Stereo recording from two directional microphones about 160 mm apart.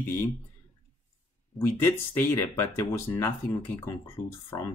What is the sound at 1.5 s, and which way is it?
Speech, 15° left (ahead or behind).